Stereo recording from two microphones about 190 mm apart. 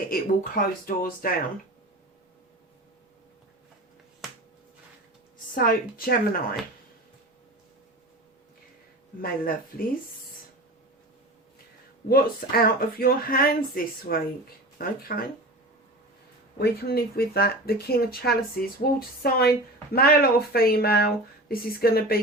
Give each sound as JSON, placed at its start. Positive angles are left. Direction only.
{"t": 0.1, "sound": "speech", "side_deg": 50}
{"t": 5.5, "sound": "speech", "side_deg": 50}
{"t": 9.2, "sound": "speech", "side_deg": 50}
{"t": 12.6, "sound": "speech", "side_deg": 50}
{"t": 16.6, "sound": "speech", "side_deg": 55}